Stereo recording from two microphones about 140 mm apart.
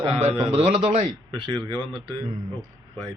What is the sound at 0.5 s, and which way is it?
Speech, 50° right (ahead or behind).